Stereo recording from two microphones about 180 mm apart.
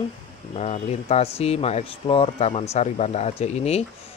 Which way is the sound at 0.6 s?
35° left (ahead or behind).